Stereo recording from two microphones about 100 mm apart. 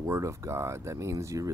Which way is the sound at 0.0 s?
30° right (ahead or behind).